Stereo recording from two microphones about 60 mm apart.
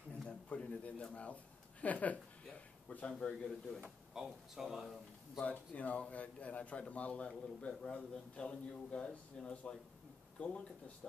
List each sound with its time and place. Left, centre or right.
0.3 s a sound: centre
1.1 s speech: left
3.1 s speech: centre
4.1 s speech: centre
5.4 s a man's voice: left